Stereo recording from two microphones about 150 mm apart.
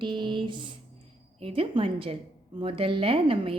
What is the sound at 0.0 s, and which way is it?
Speech, 30° right (ahead or behind).